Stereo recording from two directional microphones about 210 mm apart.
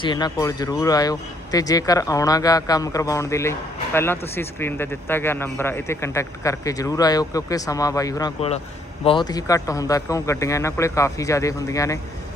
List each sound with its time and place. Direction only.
0.0 s speech: 20° left (ahead or behind)
8.4 s a man's voice: 30° left (ahead or behind)